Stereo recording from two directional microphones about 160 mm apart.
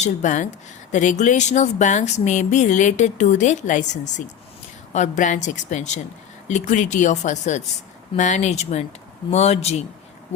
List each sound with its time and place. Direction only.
0.0 s speech: 50° left (ahead or behind)